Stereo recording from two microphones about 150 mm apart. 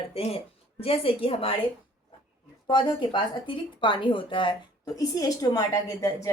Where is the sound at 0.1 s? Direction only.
40° left (ahead or behind).